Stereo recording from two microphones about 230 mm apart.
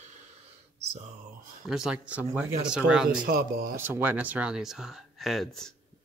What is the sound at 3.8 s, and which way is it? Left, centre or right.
Speech, centre.